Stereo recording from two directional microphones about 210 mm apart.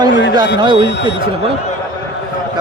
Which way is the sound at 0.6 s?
20° right (ahead or behind).